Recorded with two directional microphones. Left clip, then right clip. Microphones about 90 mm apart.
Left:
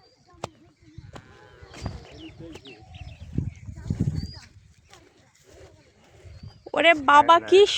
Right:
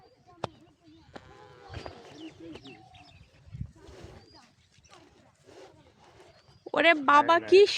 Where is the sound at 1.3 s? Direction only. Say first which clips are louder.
Left 1 dB; 40° right (ahead or behind).